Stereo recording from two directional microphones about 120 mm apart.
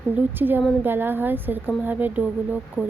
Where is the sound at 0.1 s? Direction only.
15° right (ahead or behind).